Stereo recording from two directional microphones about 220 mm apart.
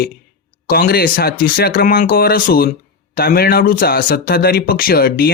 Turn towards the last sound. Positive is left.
turn(degrees=45)  # may be behind; listen again after turning